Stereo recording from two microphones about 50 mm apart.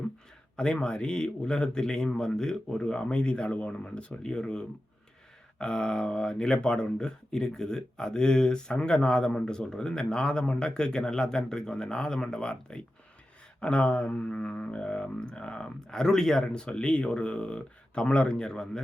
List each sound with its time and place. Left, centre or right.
0.5 s speech: centre